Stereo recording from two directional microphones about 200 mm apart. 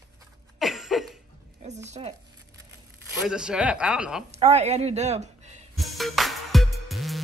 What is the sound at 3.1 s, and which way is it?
Speech, 5° right (ahead or behind).